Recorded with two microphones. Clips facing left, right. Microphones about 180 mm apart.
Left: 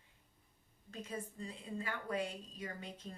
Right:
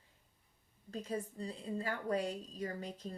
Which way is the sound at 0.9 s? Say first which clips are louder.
Right 5 dB; 35° right (ahead or behind).